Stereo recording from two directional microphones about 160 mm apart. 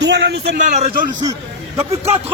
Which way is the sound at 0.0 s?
90° right.